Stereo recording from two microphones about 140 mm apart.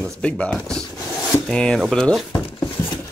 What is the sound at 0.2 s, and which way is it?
Speech, 10° left (ahead or behind).